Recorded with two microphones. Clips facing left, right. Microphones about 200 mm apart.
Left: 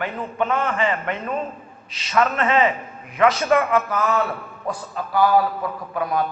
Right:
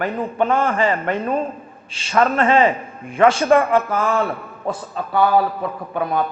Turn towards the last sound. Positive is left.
turn(degrees=-25)  # may be behind; listen again after turning